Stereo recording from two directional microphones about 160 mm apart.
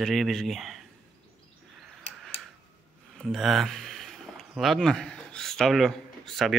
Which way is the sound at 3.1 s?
Centre (ahead or behind).